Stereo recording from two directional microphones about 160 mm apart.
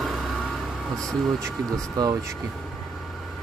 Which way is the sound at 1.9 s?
25° right (ahead or behind).